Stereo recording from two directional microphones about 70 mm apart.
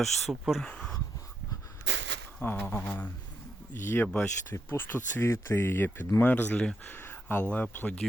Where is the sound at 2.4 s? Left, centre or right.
Left.